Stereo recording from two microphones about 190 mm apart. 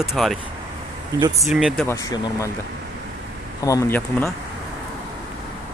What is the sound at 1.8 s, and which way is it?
Speech, 15° left (ahead or behind).